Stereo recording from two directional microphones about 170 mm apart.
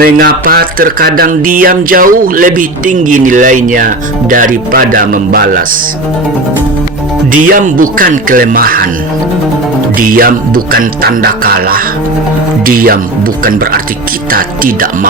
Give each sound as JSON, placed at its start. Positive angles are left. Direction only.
{"t": 0.0, "sound": "a sound", "side_deg": -60}
{"t": 7.3, "sound": "music", "side_deg": -50}
{"t": 10.0, "sound": "music", "side_deg": -55}
{"t": 14.3, "sound": "speech", "side_deg": -55}